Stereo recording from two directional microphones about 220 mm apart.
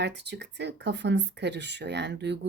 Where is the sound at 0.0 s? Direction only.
50° right (ahead or behind).